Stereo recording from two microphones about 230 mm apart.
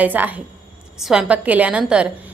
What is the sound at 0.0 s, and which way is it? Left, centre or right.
A woman's voice, centre.